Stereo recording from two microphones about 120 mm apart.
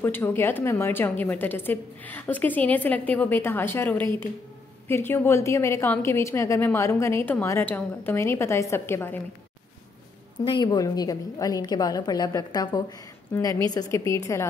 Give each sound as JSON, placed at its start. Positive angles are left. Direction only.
{"t": 0.0, "sound": "a woman's voice", "side_deg": 20}
{"t": 4.0, "sound": "a woman's voice", "side_deg": -40}
{"t": 4.8, "sound": "a woman's voice", "side_deg": 20}
{"t": 10.4, "sound": "a woman's voice", "side_deg": 40}